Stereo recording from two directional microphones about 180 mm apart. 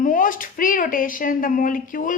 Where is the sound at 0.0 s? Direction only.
45° left (ahead or behind).